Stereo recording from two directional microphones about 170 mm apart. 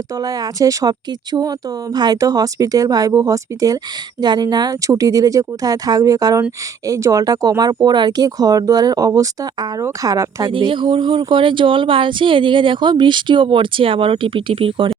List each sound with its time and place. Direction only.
0.1 s speech: 20° right (ahead or behind)